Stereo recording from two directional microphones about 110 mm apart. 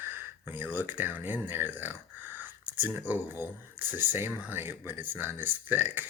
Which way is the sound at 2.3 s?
15° right (ahead or behind).